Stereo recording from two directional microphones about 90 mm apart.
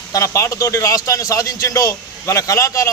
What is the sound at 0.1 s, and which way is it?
A man's voice, 35° left (ahead or behind).